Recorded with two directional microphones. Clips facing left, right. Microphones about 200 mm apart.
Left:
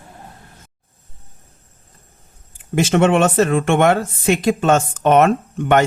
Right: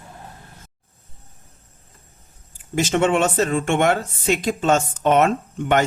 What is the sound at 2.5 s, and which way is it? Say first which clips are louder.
Speech: left 4 dB; 60° left (ahead or behind).